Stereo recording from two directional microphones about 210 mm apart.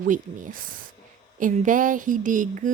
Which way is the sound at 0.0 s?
40° right (ahead or behind).